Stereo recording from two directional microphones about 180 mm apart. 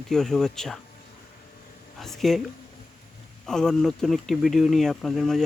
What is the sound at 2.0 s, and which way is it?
Speech, centre (ahead or behind).